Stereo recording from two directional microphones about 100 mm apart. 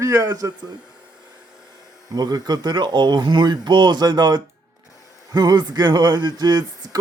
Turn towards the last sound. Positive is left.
turn(degrees=-45)  # may be behind; listen again after turning